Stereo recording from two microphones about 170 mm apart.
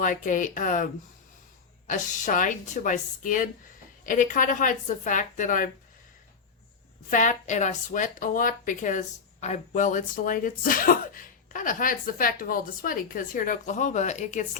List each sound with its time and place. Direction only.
0.0 s a woman's voice: 50° left (ahead or behind)
1.9 s a woman's voice: 50° left (ahead or behind)
7.1 s a woman's voice: 50° left (ahead or behind)